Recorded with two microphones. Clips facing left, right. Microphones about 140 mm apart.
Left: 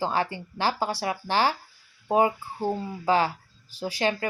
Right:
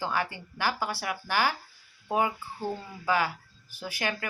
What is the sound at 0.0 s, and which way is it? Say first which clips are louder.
Speech: left 4 dB; 30° left (ahead or behind).